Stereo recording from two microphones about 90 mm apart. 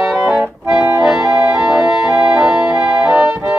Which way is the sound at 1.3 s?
45° left (ahead or behind).